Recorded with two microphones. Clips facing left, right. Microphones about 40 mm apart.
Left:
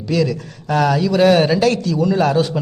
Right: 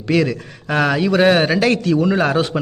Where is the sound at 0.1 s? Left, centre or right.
Right.